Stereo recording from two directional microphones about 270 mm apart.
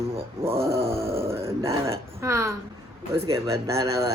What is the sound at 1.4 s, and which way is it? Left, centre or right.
Speech, centre.